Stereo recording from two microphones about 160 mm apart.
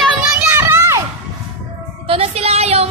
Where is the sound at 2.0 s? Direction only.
35° right (ahead or behind).